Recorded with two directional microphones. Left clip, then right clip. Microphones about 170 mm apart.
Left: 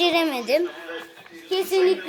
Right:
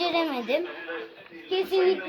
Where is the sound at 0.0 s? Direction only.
40° left (ahead or behind).